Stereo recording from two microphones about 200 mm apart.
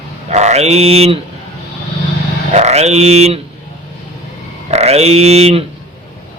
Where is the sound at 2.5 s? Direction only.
35° right (ahead or behind).